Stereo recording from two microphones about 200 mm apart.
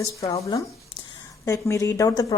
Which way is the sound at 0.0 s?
15° left (ahead or behind).